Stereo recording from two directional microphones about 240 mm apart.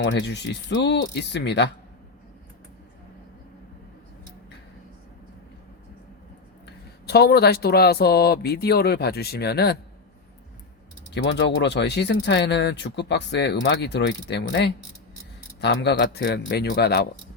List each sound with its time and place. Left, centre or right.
0.0 s speech: left
7.1 s speech: left
11.1 s speech: left